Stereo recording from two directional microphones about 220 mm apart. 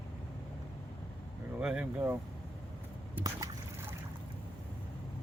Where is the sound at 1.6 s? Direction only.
5° right (ahead or behind).